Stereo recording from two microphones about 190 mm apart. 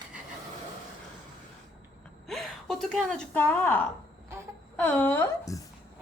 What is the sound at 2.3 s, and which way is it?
Speech, centre (ahead or behind).